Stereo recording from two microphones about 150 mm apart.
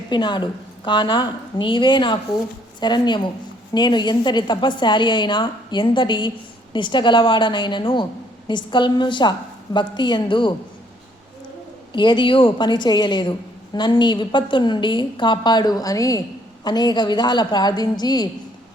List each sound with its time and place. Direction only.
0.1 s a woman's voice: 30° left (ahead or behind)
11.9 s a woman's voice: 30° left (ahead or behind)